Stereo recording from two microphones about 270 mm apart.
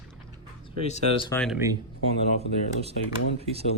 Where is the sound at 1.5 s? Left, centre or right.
Centre.